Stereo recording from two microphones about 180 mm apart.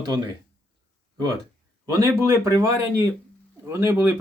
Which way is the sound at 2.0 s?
15° right (ahead or behind).